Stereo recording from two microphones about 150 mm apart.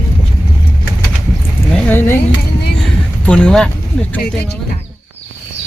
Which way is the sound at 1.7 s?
15° left (ahead or behind).